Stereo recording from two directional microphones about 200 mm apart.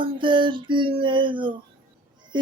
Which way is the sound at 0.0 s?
25° right (ahead or behind).